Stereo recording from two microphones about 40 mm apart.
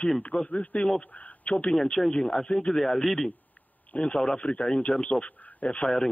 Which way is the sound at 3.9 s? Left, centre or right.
Left.